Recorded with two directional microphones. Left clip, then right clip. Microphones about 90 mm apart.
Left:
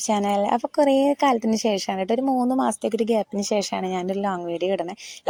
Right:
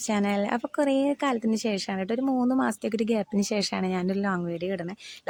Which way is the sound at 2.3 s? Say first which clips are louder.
Left 4 dB; 15° right (ahead or behind).